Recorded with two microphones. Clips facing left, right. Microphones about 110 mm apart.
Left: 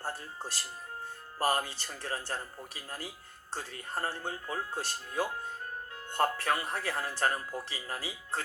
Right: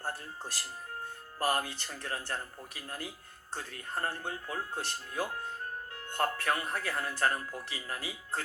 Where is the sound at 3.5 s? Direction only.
30° left (ahead or behind).